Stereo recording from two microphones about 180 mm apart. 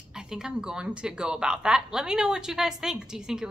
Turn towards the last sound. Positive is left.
turn(degrees=-5)  # may be behind; listen again after turning